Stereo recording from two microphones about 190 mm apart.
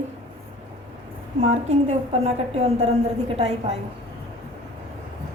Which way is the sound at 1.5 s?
35° right (ahead or behind).